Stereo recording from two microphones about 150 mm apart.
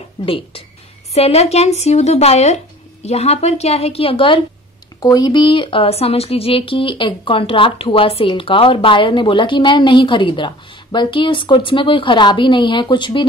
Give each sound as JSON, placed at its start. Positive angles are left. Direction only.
{"t": 0.2, "sound": "speech", "side_deg": 35}